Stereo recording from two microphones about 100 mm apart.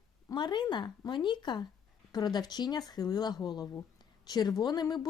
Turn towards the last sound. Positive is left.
turn(degrees=45)  # may be behind; listen again after turning